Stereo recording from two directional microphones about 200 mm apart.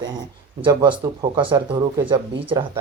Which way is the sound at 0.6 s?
20° right (ahead or behind).